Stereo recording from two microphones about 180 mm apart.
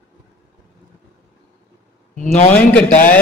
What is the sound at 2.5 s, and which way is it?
Speech, 10° left (ahead or behind).